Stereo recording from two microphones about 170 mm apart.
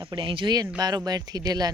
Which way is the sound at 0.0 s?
30° right (ahead or behind).